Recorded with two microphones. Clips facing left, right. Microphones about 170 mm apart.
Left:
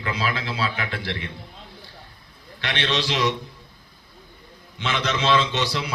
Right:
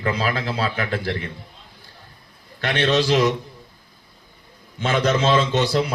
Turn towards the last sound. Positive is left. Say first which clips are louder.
# right 6 dB
turn(degrees=-50)  # may be behind; listen again after turning